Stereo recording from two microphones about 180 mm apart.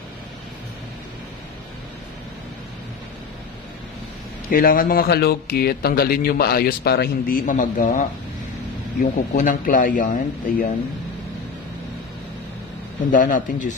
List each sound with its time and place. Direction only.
4.5 s speech: 55° left (ahead or behind)
13.1 s speech: 50° left (ahead or behind)